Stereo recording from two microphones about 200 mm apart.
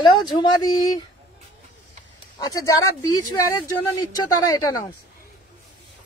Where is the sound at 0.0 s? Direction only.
20° left (ahead or behind).